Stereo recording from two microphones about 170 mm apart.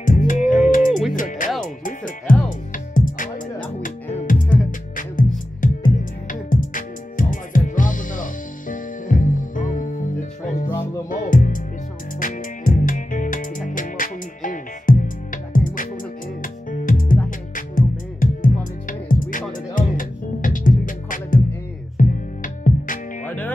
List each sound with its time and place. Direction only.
0.0 s music: 50° left (ahead or behind)
1.1 s speech: 50° left (ahead or behind)
1.9 s music: 50° left (ahead or behind)
4.3 s music: 50° left (ahead or behind)
23.2 s music: 10° left (ahead or behind)